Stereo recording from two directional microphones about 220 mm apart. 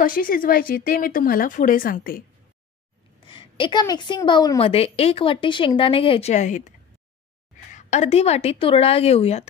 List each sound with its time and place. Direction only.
0.0 s speech: 40° left (ahead or behind)
3.3 s a woman's voice: 20° left (ahead or behind)
7.7 s a woman's voice: 30° left (ahead or behind)